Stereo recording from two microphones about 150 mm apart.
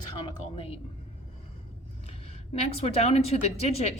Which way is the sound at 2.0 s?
40° left (ahead or behind).